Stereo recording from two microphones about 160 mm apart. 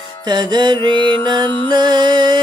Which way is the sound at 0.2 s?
25° right (ahead or behind).